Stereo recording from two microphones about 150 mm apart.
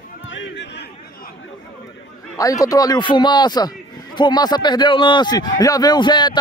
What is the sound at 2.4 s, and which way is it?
A man's voice, 25° left (ahead or behind).